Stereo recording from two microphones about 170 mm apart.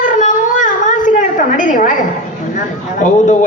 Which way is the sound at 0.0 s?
50° left (ahead or behind).